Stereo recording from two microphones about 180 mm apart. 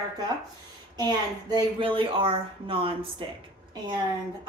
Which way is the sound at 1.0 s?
20° right (ahead or behind).